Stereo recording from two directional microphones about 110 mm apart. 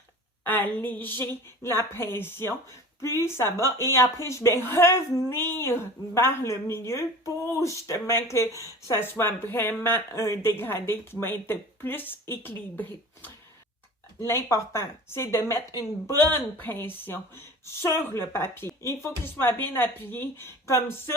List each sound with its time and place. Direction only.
0.4 s a woman's voice: 15° left (ahead or behind)